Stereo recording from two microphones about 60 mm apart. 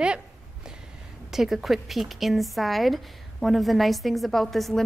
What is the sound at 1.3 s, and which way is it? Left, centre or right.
A woman's voice, centre.